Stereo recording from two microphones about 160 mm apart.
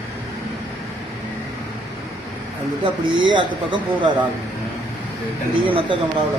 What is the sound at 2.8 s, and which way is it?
Speech, 30° right (ahead or behind).